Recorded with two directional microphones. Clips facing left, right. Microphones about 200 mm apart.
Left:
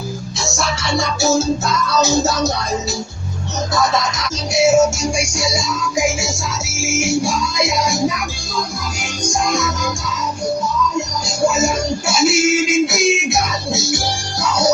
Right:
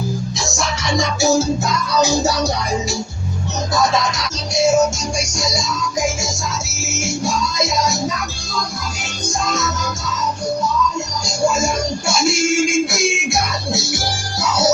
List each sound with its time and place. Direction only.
0.9 s music: 15° right (ahead or behind)
4.5 s music: 10° left (ahead or behind)
11.4 s music: 5° left (ahead or behind)